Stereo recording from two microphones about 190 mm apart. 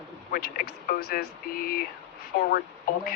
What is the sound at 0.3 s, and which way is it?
Speech, 50° left (ahead or behind).